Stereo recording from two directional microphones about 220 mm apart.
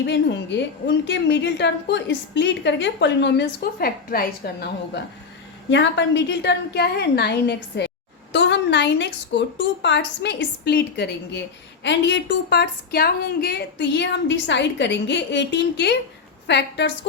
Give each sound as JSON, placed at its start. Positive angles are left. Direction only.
{"t": 0.0, "sound": "a woman's voice", "side_deg": 55}